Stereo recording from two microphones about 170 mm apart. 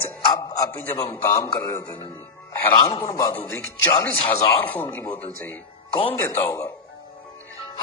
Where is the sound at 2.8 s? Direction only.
30° left (ahead or behind).